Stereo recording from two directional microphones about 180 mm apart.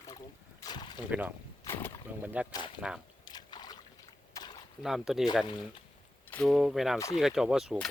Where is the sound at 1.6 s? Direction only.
15° left (ahead or behind).